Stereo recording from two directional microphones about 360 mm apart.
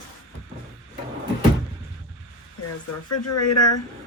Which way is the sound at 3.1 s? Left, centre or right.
Left.